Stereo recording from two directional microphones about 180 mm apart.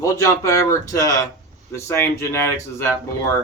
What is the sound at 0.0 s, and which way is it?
Speech, 15° left (ahead or behind).